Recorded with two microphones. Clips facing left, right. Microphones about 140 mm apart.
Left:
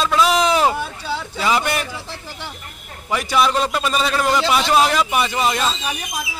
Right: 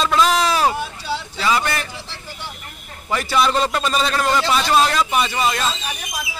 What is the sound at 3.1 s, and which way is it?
A man's voice, 10° left (ahead or behind).